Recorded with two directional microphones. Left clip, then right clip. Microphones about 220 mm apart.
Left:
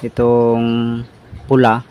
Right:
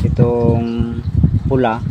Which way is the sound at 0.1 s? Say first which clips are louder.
Left 4 dB; 30° left (ahead or behind).